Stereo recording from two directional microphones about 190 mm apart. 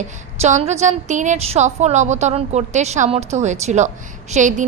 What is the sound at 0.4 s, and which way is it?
A woman's voice, 35° right (ahead or behind).